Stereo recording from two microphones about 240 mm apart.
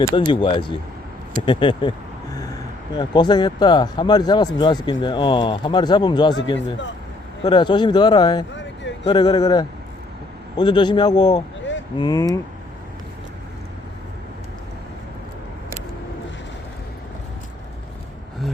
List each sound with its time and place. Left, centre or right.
0.1 s speech: centre
2.9 s speech: centre